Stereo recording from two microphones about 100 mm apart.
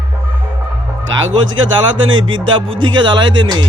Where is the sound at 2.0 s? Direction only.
50° right (ahead or behind).